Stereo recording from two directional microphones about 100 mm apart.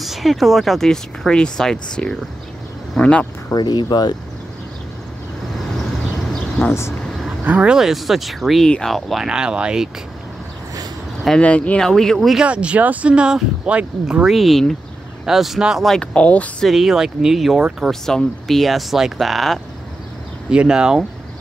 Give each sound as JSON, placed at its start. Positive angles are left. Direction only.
{"t": 0.0, "sound": "speech", "side_deg": 0}
{"t": 3.5, "sound": "speech", "side_deg": 45}
{"t": 7.2, "sound": "speech", "side_deg": -10}
{"t": 11.2, "sound": "speech", "side_deg": 10}
{"t": 12.4, "sound": "speech", "side_deg": -10}
{"t": 16.6, "sound": "speech", "side_deg": 0}